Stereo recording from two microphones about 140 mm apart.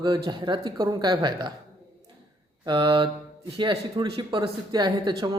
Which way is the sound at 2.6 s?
35° right (ahead or behind).